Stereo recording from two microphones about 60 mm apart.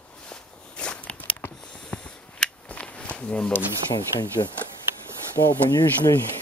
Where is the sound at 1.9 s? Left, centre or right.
Centre.